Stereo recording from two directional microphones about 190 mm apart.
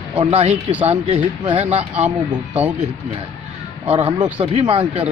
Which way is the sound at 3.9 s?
30° right (ahead or behind).